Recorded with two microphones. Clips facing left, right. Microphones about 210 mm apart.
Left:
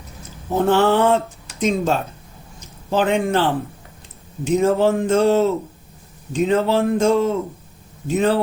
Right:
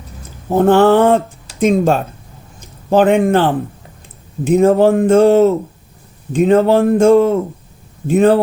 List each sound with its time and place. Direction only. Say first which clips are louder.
0.5 s speech: right 6 dB; 55° right (ahead or behind)